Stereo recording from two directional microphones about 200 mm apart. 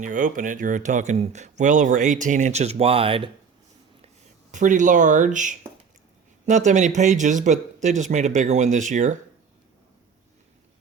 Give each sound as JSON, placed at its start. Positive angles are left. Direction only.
{"t": 0.0, "sound": "speech", "side_deg": -40}
{"t": 4.5, "sound": "speech", "side_deg": -40}